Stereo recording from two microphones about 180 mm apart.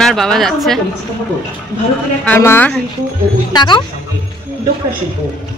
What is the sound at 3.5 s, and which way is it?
Speech, 25° left (ahead or behind).